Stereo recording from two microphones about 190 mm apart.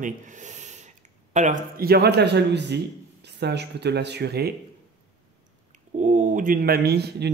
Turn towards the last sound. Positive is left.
turn(degrees=-60)  # may be behind; listen again after turning